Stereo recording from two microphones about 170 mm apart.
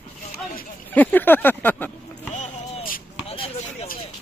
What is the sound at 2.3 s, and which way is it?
Vehicle, 50° left (ahead or behind).